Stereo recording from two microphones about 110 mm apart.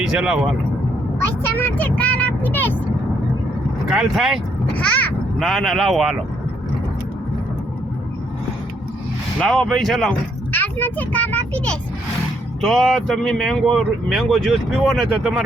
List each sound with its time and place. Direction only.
0.0 s speech: 5° right (ahead or behind)
1.2 s speech: 20° left (ahead or behind)
3.8 s speech: 5° right (ahead or behind)
4.7 s a child's voice: 15° left (ahead or behind)
5.4 s speech: centre (ahead or behind)
9.4 s speech: 5° left (ahead or behind)
10.5 s a child's voice: 20° left (ahead or behind)
12.6 s speech: centre (ahead or behind)